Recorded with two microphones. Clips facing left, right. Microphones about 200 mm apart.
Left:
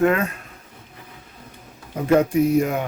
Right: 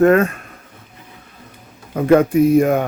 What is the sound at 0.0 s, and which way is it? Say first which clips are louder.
Speech: right 7 dB; 45° right (ahead or behind).